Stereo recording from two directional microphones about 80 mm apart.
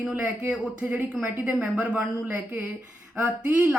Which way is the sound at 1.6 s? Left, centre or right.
Centre.